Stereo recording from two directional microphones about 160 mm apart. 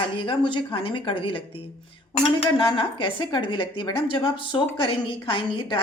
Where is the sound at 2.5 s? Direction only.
30° left (ahead or behind).